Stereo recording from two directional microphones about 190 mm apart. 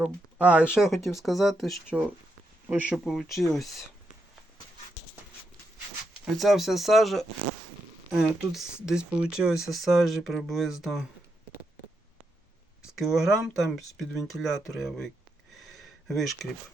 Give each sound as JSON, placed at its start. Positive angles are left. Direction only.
{"t": 0.0, "sound": "speech", "side_deg": -5}
{"t": 6.3, "sound": "speech", "side_deg": 0}
{"t": 13.0, "sound": "speech", "side_deg": 0}
{"t": 15.5, "sound": "a sound", "side_deg": 0}